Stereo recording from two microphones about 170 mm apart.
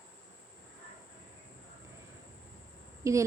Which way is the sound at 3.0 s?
15° right (ahead or behind).